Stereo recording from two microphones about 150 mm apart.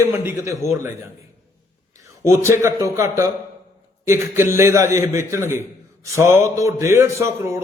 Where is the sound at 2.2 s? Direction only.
20° right (ahead or behind).